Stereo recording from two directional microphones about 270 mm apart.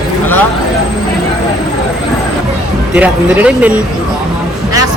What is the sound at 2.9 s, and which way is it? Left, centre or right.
Speech, centre.